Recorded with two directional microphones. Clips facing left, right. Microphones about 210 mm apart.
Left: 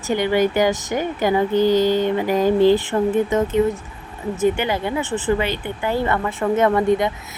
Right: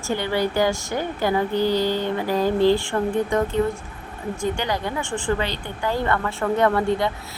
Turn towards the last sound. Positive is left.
turn(degrees=20)  # may be behind; listen again after turning